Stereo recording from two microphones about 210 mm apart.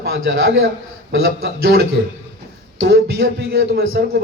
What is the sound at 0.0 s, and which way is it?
Speech, 65° right (ahead or behind).